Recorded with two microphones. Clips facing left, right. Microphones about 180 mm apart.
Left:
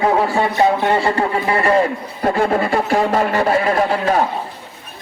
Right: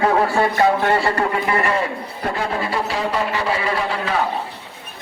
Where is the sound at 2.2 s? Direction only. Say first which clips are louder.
Left 7 dB; 50° left (ahead or behind).